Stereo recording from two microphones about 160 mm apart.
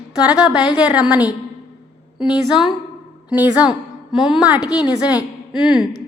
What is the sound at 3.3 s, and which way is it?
A woman's voice, 10° right (ahead or behind).